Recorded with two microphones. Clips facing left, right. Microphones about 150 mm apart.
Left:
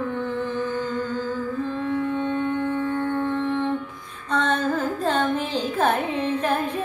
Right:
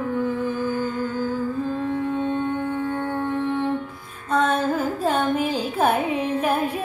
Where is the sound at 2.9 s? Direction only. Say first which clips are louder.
Left 1 dB; 30° right (ahead or behind).